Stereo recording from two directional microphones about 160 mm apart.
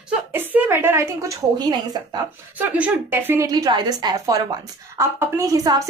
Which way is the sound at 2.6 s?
10° right (ahead or behind).